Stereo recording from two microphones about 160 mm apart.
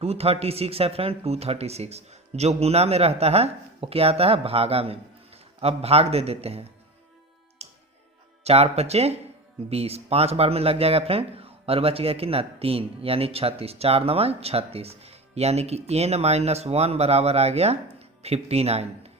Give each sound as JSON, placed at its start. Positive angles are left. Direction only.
{"t": 0.0, "sound": "speech", "side_deg": -40}
{"t": 7.6, "sound": "music", "side_deg": -40}
{"t": 8.4, "sound": "speech", "side_deg": -40}